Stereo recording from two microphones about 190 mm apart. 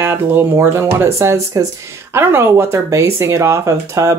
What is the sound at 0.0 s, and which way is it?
Speech, 10° right (ahead or behind).